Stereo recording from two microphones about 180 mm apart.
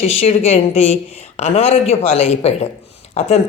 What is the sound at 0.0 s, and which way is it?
Speech, 35° left (ahead or behind).